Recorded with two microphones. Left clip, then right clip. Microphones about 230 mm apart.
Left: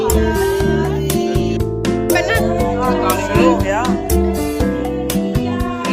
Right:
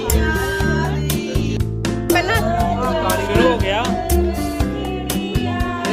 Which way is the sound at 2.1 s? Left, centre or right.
Centre.